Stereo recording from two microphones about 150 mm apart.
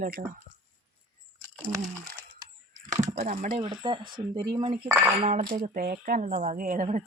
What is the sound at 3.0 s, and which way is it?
Speech, 45° right (ahead or behind).